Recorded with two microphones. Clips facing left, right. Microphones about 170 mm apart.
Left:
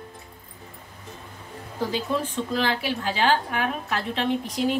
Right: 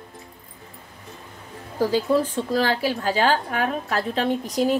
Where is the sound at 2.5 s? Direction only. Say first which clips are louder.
Right 3 dB; 40° right (ahead or behind).